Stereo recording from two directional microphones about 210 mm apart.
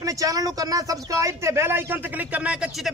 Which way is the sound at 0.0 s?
15° right (ahead or behind).